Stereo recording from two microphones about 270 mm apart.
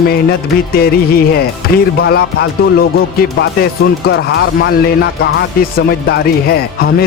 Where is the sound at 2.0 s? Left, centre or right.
Left.